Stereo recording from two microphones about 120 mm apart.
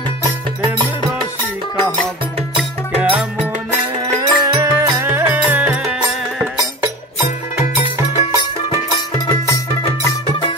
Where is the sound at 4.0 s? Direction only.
40° right (ahead or behind).